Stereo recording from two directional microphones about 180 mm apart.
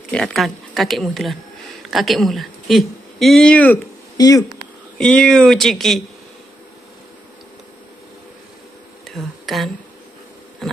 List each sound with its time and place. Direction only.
0.1 s speech: centre (ahead or behind)
4.2 s speech: 20° left (ahead or behind)
4.9 s speech: 5° left (ahead or behind)
9.0 s a sound: centre (ahead or behind)